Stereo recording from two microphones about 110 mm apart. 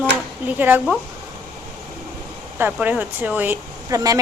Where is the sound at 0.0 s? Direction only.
15° right (ahead or behind).